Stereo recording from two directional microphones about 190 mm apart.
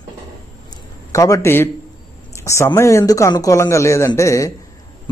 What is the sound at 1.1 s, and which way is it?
A man's voice, 15° left (ahead or behind).